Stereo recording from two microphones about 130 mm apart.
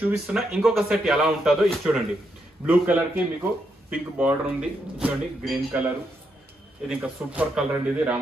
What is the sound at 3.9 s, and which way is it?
Speech, 10° right (ahead or behind).